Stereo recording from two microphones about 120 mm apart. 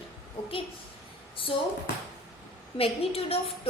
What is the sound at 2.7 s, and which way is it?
Speech, 55° left (ahead or behind).